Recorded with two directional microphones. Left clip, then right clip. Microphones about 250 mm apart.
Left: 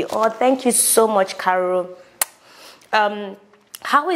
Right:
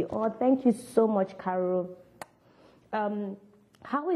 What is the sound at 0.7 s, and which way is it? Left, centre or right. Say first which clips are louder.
Speech: left 9 dB; left.